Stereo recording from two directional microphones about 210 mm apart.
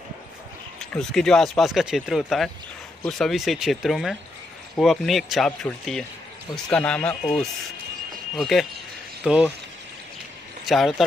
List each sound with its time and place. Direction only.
0.7 s speech: centre (ahead or behind)
10.6 s speech: centre (ahead or behind)